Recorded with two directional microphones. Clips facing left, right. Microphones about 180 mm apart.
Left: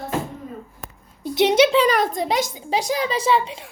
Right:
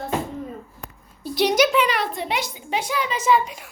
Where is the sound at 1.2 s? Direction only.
20° left (ahead or behind).